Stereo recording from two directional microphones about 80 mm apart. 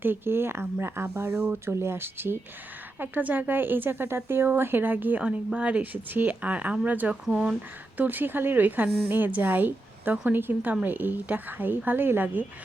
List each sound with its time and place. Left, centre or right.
0.0 s a woman's voice: right; by 7.5 s centre
7.9 s a woman's voice: right